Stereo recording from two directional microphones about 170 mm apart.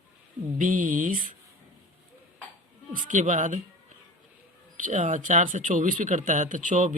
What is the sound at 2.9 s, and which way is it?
Speech, 50° right (ahead or behind).